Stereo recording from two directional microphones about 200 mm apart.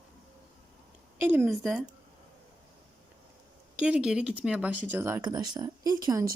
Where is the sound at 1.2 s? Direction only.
10° right (ahead or behind).